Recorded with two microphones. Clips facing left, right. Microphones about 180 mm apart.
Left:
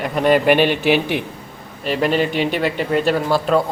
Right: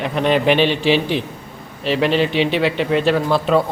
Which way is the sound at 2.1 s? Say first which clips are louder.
Right 1 dB; 45° left (ahead or behind).